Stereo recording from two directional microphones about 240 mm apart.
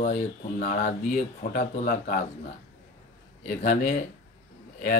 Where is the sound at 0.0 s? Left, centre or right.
Left.